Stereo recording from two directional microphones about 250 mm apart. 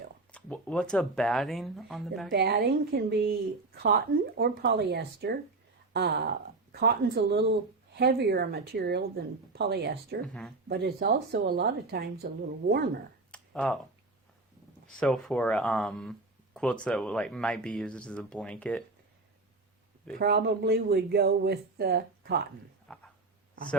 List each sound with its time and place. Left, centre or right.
0.3 s speech: centre
2.3 s speech: right
4.4 s speech: right
10.2 s speech: centre
10.7 s speech: right
13.3 s a sound: centre
14.9 s speech: centre
20.1 s speech: right
22.9 s a sound: centre